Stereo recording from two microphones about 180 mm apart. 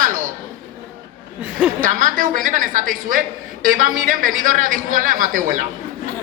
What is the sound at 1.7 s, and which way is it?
A woman's voice, 50° right (ahead or behind).